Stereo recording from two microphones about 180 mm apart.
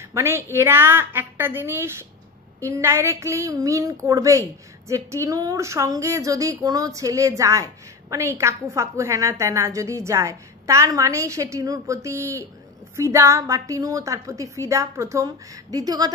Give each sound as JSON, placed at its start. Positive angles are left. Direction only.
{"t": 0.0, "sound": "a woman's voice", "side_deg": -15}